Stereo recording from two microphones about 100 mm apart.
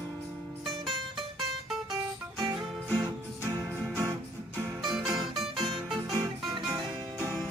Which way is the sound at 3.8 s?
25° right (ahead or behind).